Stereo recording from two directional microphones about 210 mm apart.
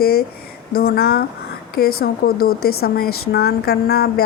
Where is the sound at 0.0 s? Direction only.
45° left (ahead or behind).